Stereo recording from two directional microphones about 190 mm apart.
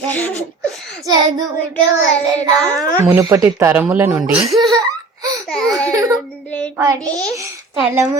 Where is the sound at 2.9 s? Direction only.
15° right (ahead or behind).